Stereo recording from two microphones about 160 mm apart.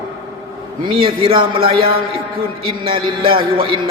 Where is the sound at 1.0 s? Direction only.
35° right (ahead or behind).